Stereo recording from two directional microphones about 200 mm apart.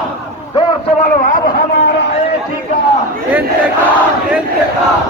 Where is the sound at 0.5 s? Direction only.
25° left (ahead or behind).